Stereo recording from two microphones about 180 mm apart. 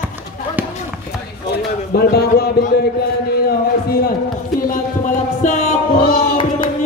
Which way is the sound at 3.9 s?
55° left (ahead or behind).